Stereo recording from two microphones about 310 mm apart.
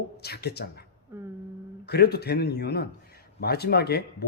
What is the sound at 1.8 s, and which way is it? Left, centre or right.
Speech, left.